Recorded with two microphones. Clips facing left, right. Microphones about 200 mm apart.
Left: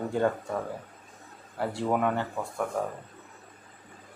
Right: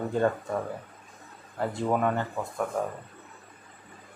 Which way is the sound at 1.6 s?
10° left (ahead or behind).